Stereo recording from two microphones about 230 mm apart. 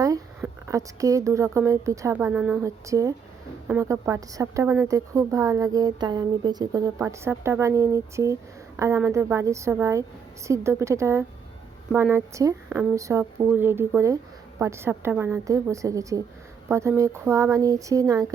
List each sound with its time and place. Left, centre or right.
0.0 s a woman's voice: centre